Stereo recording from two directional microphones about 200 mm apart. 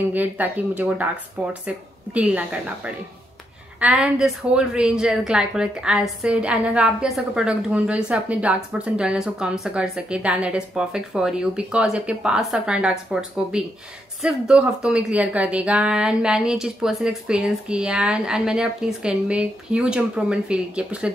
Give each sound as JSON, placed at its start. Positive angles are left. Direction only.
{"t": 0.1, "sound": "a woman's voice", "side_deg": -10}